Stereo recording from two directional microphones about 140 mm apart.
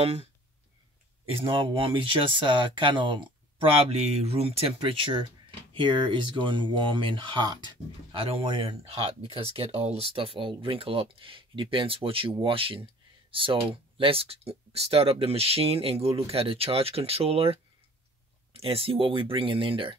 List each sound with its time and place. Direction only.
0.0 s speech: 45° right (ahead or behind)